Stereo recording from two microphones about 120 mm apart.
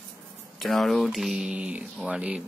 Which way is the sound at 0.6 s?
Centre (ahead or behind).